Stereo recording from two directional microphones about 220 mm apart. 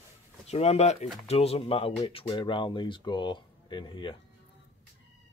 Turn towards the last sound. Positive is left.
turn(degrees=20)  # may be behind; listen again after turning